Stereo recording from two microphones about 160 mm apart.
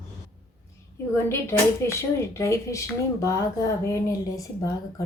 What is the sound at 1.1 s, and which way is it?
Speech, 15° left (ahead or behind).